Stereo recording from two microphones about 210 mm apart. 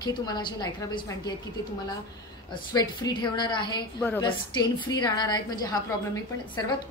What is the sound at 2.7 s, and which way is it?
A woman's voice, 20° left (ahead or behind).